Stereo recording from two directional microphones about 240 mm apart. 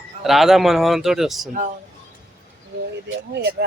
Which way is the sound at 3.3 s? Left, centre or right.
Right.